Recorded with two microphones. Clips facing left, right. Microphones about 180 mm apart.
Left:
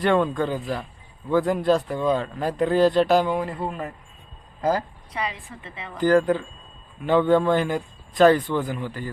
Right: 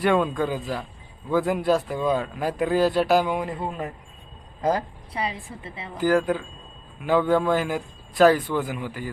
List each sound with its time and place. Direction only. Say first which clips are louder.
0.0 s speech: left 1 dB; 5° right (ahead or behind)
5.1 s a woman's voice: right 1 dB; 30° right (ahead or behind)
6.0 s a man's voice: left 3 dB; 5° right (ahead or behind)